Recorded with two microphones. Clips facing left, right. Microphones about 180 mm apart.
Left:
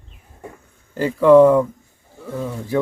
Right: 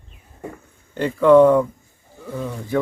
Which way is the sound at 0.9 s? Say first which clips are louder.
Left 1 dB; 5° left (ahead or behind).